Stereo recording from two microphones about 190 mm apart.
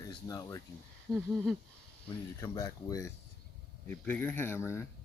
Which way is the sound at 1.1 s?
20° right (ahead or behind).